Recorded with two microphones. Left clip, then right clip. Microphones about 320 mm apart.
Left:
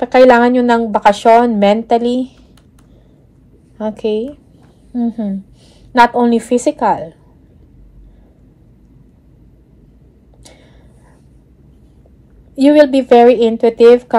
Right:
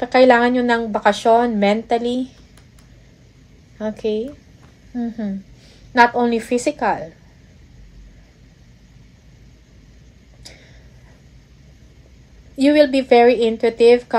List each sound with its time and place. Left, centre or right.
0.0 s speech: left
3.8 s speech: left
12.5 s speech: centre